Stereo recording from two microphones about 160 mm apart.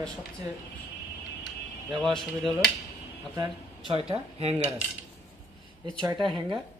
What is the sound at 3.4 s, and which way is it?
Speech, 30° right (ahead or behind).